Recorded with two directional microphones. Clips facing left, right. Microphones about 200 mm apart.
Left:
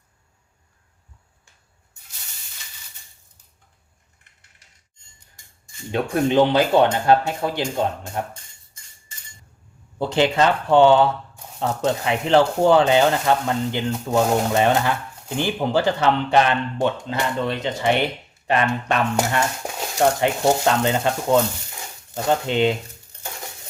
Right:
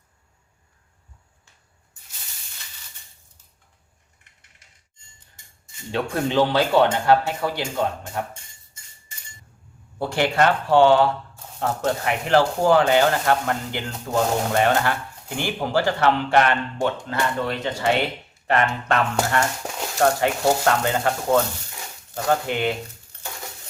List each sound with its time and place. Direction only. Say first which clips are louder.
5.9 s speech: left 3 dB; 20° left (ahead or behind)
10.0 s speech: left 2 dB; 20° left (ahead or behind)
22.1 s speech: left 2 dB; 20° left (ahead or behind)